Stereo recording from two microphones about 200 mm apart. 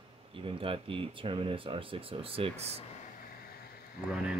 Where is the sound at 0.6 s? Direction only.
25° right (ahead or behind).